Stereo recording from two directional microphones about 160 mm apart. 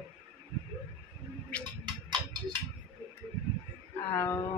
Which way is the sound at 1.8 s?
30° right (ahead or behind).